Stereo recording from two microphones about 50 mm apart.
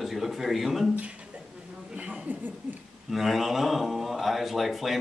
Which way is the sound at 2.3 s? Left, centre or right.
Right.